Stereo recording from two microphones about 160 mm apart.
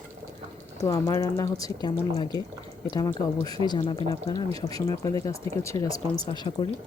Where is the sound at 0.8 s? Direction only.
20° left (ahead or behind).